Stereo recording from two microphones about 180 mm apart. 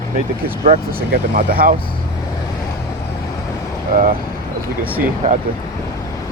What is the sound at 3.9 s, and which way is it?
Speech, 50° right (ahead or behind).